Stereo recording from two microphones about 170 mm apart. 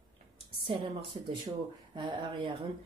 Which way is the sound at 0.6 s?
30° right (ahead or behind).